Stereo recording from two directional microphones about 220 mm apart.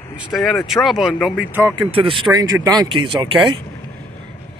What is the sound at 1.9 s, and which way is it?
Speech, 25° right (ahead or behind).